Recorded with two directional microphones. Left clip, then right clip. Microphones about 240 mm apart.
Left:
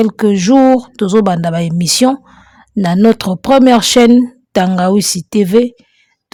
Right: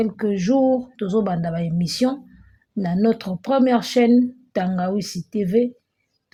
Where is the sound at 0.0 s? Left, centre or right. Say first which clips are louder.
Left 10 dB; left.